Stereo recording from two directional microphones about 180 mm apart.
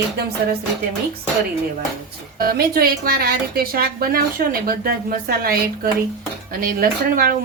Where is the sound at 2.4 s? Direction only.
55° right (ahead or behind).